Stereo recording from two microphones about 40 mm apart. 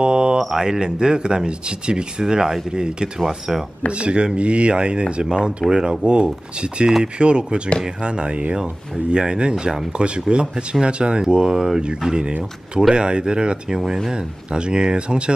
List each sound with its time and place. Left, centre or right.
0.0 s mantra: right
0.4 s speech: centre
3.2 s speech: centre
3.9 s speech: right
13.7 s speech: centre
14.1 s speech: right